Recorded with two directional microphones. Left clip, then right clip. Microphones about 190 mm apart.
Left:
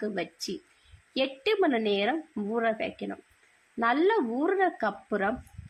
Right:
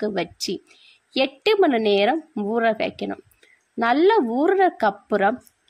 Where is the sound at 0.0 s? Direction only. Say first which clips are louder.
Right 8 dB; 40° right (ahead or behind).